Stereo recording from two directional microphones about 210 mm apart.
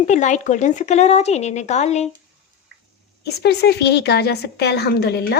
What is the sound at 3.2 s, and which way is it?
A woman's voice, 50° left (ahead or behind).